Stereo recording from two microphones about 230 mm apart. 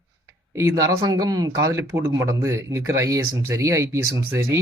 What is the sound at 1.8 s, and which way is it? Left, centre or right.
Speech, right.